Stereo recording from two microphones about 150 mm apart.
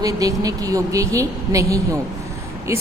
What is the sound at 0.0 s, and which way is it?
A woman's voice, 25° right (ahead or behind).